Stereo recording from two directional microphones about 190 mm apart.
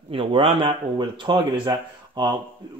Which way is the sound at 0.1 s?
30° right (ahead or behind).